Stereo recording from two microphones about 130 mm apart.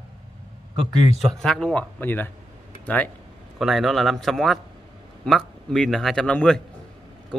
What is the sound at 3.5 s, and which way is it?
A man's voice, centre (ahead or behind).